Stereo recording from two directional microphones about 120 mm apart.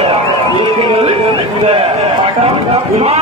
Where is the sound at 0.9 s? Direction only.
55° right (ahead or behind).